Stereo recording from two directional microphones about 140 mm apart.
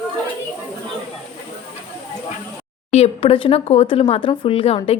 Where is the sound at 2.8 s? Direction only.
50° left (ahead or behind).